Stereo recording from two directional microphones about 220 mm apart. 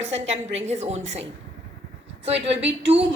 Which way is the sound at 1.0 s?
55° right (ahead or behind).